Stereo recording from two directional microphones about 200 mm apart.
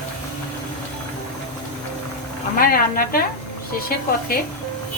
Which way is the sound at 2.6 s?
45° left (ahead or behind).